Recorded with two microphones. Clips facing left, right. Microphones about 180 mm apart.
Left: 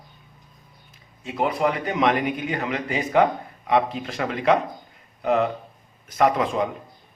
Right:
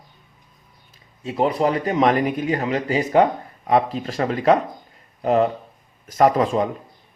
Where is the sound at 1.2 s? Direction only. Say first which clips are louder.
Right 3 dB; 35° right (ahead or behind).